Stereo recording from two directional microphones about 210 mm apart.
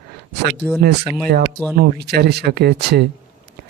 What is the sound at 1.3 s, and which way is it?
Speech, 50° right (ahead or behind).